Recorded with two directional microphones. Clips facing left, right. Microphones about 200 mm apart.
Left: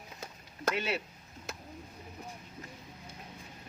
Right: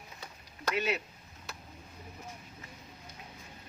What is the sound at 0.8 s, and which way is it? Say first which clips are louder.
Speech: right 6 dB; 30° left (ahead or behind).